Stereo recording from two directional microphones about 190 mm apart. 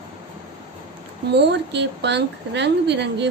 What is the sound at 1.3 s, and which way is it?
A woman's voice, 65° right (ahead or behind).